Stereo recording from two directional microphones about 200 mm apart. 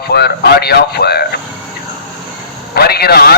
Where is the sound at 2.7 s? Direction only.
50° left (ahead or behind).